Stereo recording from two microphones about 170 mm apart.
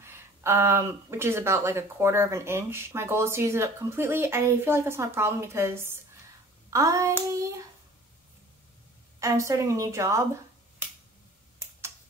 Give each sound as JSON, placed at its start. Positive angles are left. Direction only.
{"t": 0.0, "sound": "speech", "side_deg": -15}
{"t": 6.7, "sound": "hands", "side_deg": -20}
{"t": 9.2, "sound": "speech", "side_deg": -20}